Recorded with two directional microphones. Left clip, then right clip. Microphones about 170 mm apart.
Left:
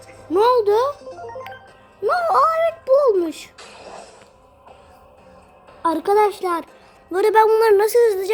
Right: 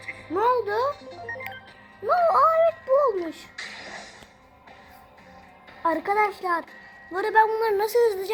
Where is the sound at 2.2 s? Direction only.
55° left (ahead or behind).